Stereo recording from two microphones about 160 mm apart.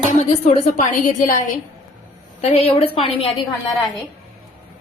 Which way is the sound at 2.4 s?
40° left (ahead or behind).